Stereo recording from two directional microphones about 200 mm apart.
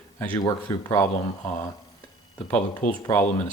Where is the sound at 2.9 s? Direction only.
10° left (ahead or behind).